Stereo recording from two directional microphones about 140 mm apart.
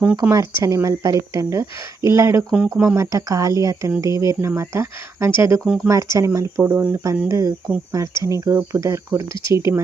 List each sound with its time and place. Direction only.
0.2 s speech: 25° right (ahead or behind)
5.6 s speech: 5° right (ahead or behind)
5.9 s speech: 25° right (ahead or behind)
6.6 s speech: 10° right (ahead or behind)
6.9 s speech: 25° right (ahead or behind)